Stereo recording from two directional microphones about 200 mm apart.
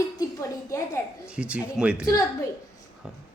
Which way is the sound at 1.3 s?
5° right (ahead or behind).